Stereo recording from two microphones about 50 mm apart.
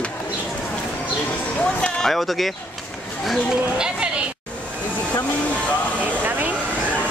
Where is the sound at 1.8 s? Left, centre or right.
Centre.